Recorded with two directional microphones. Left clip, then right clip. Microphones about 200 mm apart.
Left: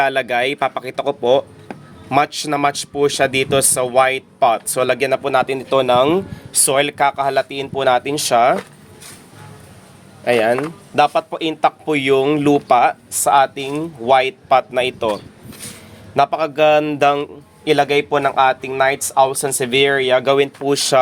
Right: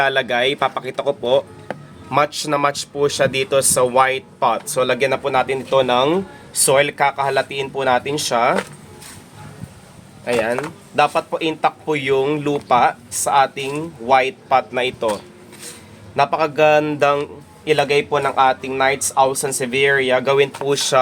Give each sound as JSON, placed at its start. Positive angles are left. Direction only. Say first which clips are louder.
{"t": 0.0, "sound": "speech", "louder": "even", "side_deg": 35}
{"t": 10.2, "sound": "speech", "louder": "left 4 dB", "side_deg": 40}